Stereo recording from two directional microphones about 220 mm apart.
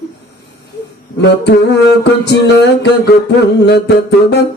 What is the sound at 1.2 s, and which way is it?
Humming, 50° left (ahead or behind).